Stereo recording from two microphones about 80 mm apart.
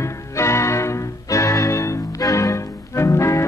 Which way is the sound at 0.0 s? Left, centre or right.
Left.